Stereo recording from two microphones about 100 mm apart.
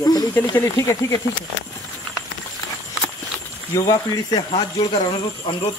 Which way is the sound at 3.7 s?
35° left (ahead or behind).